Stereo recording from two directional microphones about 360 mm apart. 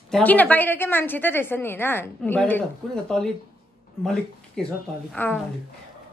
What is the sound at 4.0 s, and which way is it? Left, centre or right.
A woman's voice, centre.